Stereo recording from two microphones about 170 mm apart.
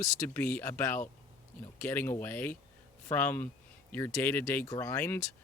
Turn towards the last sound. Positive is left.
turn(degrees=15)  # may be behind; listen again after turning